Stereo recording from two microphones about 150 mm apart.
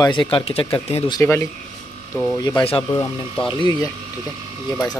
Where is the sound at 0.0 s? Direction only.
30° left (ahead or behind).